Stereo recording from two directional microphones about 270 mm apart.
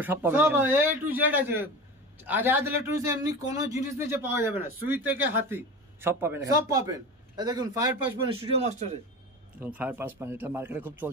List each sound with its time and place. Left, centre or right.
0.0 s a man's voice: centre
8.3 s speech: right
9.6 s a man's voice: centre